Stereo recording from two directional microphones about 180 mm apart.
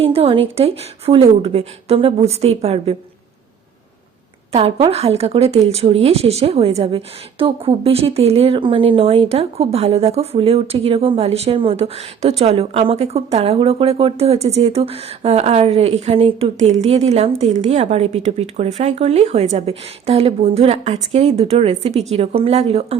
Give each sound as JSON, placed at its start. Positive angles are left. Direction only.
{"t": 0.0, "sound": "speech", "side_deg": -35}
{"t": 4.5, "sound": "speech", "side_deg": -35}